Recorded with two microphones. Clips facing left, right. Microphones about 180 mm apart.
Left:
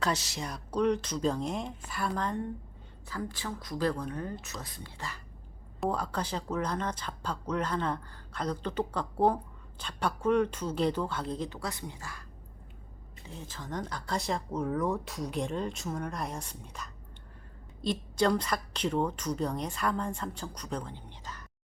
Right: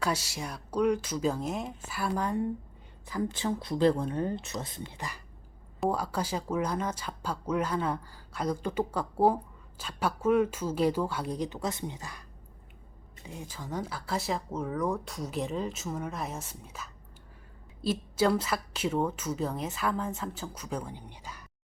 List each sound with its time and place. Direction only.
0.0 s speech: 10° right (ahead or behind)
3.1 s speech: 20° right (ahead or behind)
13.2 s speech: 10° right (ahead or behind)